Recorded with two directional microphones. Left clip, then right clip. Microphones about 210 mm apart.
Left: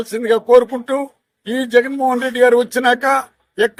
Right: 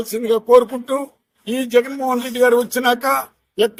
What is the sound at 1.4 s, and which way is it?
A man's voice, 15° left (ahead or behind).